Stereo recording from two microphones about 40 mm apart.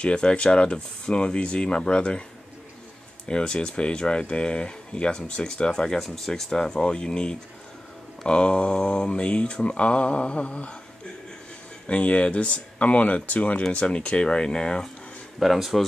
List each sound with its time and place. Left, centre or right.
0.0 s speech: left
3.3 s speech: left
5.9 s speech: centre; by 10.8 s left
11.9 s speech: left
13.6 s speech: left
15.3 s speech: centre